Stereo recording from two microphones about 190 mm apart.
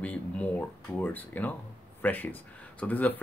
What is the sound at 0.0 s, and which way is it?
Speech, 10° left (ahead or behind).